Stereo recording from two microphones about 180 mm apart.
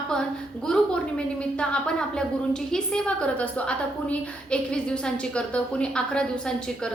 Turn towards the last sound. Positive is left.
turn(degrees=5)  # may be behind; listen again after turning